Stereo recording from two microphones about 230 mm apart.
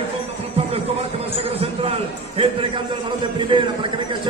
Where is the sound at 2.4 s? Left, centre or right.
Right.